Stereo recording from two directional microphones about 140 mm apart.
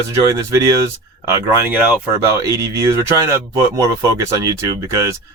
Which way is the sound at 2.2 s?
20° right (ahead or behind).